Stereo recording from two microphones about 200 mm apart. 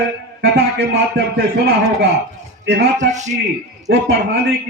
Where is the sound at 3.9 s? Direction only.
55° right (ahead or behind).